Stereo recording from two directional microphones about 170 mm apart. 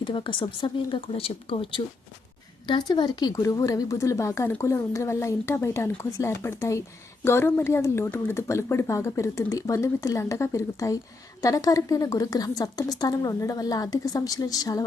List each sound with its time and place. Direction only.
0.0 s a woman's voice: 30° left (ahead or behind)